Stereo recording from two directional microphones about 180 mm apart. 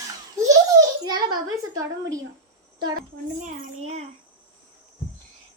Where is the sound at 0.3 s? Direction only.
20° right (ahead or behind).